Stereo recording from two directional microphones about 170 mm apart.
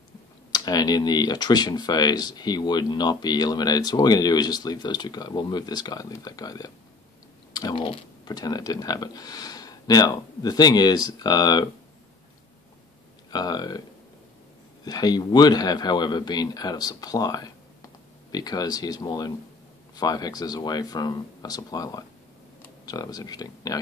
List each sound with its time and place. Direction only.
0.5 s speech: 20° left (ahead or behind)
13.3 s speech: 25° left (ahead or behind)
14.9 s speech: 25° left (ahead or behind)